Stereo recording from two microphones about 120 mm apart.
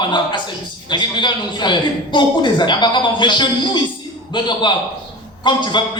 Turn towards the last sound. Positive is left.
turn(degrees=40)  # may be behind; listen again after turning